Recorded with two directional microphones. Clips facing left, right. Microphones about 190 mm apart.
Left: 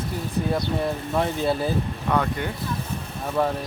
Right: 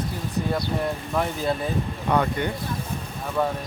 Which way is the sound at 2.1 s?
Centre (ahead or behind).